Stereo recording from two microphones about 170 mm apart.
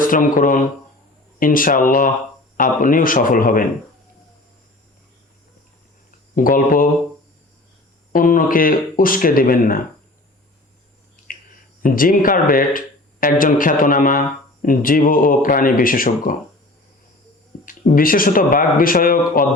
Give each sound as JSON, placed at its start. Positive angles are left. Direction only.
{"t": 0.1, "sound": "speech", "side_deg": 50}
{"t": 6.3, "sound": "speech", "side_deg": 55}
{"t": 8.1, "sound": "speech", "side_deg": 55}
{"t": 11.8, "sound": "speech", "side_deg": 55}
{"t": 17.7, "sound": "speech", "side_deg": 55}